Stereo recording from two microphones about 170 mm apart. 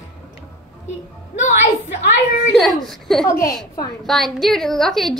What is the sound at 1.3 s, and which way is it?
A woman's voice, 45° left (ahead or behind).